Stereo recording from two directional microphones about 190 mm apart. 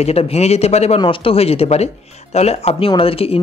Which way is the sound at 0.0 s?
35° left (ahead or behind).